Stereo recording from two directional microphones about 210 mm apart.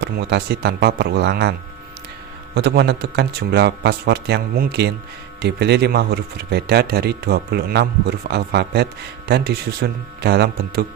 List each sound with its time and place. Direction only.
0.0 s speech: 50° right (ahead or behind)
2.6 s speech: 50° right (ahead or behind)